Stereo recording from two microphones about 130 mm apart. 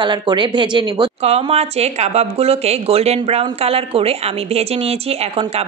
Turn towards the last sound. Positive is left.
turn(degrees=-50)  # may be behind; listen again after turning